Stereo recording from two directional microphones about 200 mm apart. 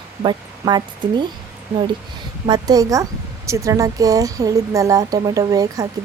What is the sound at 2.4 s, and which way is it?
Speech, 20° right (ahead or behind).